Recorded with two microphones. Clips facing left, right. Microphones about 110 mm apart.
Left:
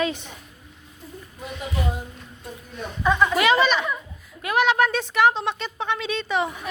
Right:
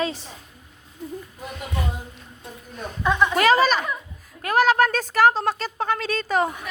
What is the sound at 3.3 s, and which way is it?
Speech, 40° right (ahead or behind).